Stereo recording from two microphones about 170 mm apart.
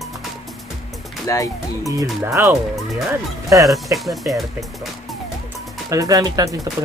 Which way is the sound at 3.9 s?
Centre (ahead or behind).